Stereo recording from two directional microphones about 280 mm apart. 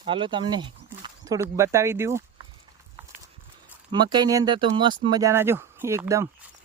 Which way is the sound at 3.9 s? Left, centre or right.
Centre.